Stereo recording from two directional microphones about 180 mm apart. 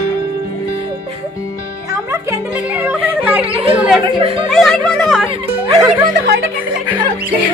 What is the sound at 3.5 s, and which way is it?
Speech, 30° right (ahead or behind).